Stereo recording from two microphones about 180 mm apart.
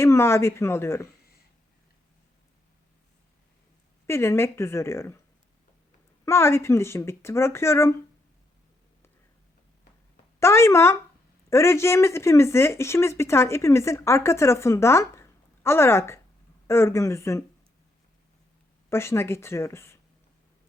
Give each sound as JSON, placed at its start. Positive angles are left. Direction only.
{"t": 0.0, "sound": "speech", "side_deg": 15}
{"t": 4.0, "sound": "speech", "side_deg": 15}
{"t": 6.2, "sound": "speech", "side_deg": 15}
{"t": 10.4, "sound": "speech", "side_deg": 15}
{"t": 18.9, "sound": "speech", "side_deg": 15}